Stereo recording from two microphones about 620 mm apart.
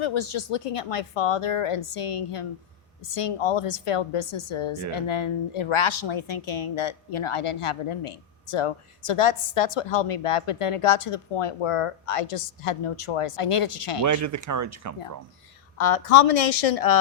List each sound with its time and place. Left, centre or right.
0.0 s a woman's voice: left
14.0 s speech: right
15.8 s a woman's voice: left